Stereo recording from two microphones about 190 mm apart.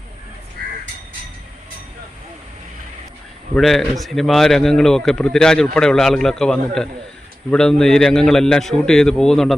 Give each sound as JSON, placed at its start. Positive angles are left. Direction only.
{"t": 0.6, "sound": "crow", "side_deg": -55}
{"t": 3.5, "sound": "speech", "side_deg": 0}